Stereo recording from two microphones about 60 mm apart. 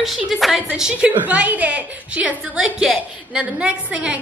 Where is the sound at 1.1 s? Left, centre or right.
Right.